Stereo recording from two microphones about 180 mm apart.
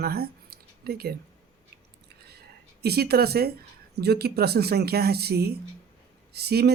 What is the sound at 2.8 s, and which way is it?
Speech, 60° right (ahead or behind).